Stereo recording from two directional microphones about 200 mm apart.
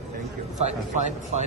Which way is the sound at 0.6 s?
35° right (ahead or behind).